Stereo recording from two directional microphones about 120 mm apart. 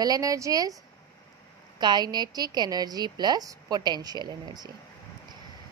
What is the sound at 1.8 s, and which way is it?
A woman's voice, 40° right (ahead or behind).